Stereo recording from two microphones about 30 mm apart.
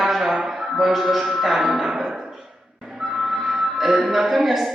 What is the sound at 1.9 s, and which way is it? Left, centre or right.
Music, centre.